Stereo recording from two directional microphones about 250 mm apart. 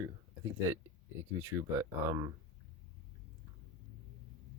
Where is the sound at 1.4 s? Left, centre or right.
Centre.